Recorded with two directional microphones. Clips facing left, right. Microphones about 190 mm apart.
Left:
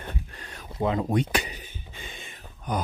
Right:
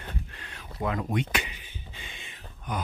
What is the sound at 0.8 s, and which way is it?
Speech, 25° left (ahead or behind).